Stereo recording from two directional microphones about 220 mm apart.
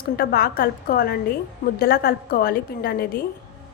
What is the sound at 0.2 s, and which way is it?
A woman's voice, 45° left (ahead or behind).